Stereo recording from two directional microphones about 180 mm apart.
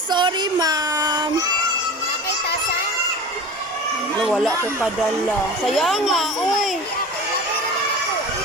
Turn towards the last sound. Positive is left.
turn(degrees=0)  # may be behind; listen again after turning